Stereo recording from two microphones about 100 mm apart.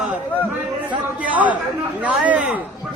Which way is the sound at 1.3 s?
15° right (ahead or behind).